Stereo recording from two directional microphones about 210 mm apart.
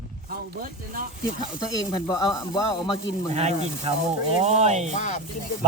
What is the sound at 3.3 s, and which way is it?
Speech, 30° right (ahead or behind).